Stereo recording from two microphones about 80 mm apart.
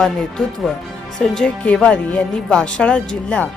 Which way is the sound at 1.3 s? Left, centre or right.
Centre.